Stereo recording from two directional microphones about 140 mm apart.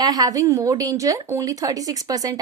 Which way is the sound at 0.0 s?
30° right (ahead or behind).